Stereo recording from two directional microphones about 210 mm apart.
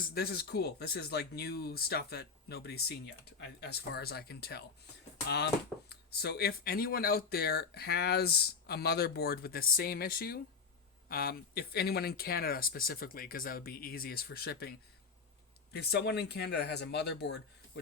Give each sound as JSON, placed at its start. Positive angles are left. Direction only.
{"t": 0.0, "sound": "speech", "side_deg": 45}
{"t": 5.9, "sound": "speech", "side_deg": 50}